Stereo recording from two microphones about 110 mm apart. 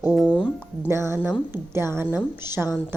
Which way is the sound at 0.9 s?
25° right (ahead or behind).